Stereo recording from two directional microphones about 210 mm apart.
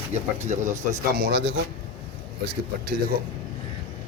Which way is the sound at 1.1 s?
50° right (ahead or behind).